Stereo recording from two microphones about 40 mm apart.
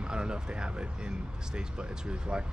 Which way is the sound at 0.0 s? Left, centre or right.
Right.